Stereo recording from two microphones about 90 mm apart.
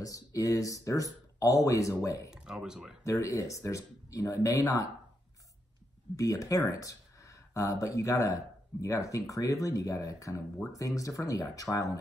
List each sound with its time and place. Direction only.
0.0 s speech: 40° left (ahead or behind)
2.3 s speech: 5° right (ahead or behind)
3.1 s speech: 35° left (ahead or behind)
6.1 s speech: 40° left (ahead or behind)